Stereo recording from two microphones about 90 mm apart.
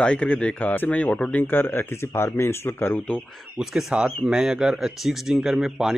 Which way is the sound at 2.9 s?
15° left (ahead or behind).